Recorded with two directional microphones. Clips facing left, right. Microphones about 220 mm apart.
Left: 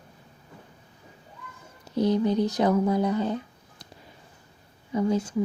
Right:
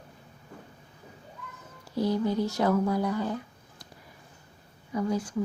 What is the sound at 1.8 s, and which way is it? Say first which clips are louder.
Speech: left 4 dB; 20° left (ahead or behind).